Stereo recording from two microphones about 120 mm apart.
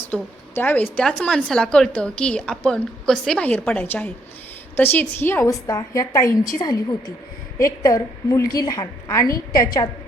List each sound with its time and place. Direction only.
0.1 s a woman's voice: 15° left (ahead or behind)
5.6 s a woman's voice: 30° left (ahead or behind)
7.6 s a woman's voice: 30° left (ahead or behind)